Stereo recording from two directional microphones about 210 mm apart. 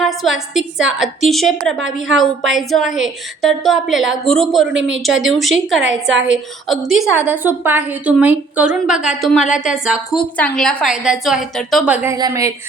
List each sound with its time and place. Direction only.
0.0 s a woman's voice: centre (ahead or behind)
6.1 s a woman's voice: 60° right (ahead or behind)
6.7 s a woman's voice: centre (ahead or behind)
12.1 s a woman's voice: 15° right (ahead or behind)